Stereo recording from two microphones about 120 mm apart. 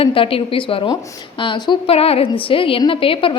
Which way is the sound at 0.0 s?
50° left (ahead or behind).